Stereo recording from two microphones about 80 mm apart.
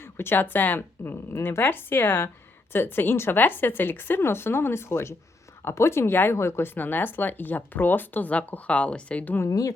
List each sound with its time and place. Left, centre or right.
0.0 s speech: left
9.5 s speech: left